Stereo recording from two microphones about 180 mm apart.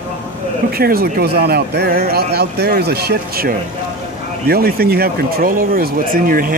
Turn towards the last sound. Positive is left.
turn(degrees=-55)  # may be behind; listen again after turning